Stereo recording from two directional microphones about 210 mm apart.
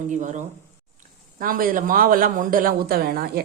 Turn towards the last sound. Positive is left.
turn(degrees=-45)  # may be behind; listen again after turning